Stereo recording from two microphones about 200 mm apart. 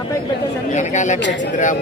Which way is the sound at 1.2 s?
60° left (ahead or behind).